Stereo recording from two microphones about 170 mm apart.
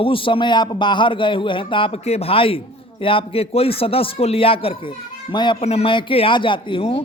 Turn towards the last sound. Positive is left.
turn(degrees=30)  # may be behind; listen again after turning